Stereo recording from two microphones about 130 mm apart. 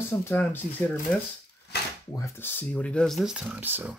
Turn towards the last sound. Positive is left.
turn(degrees=-15)  # may be behind; listen again after turning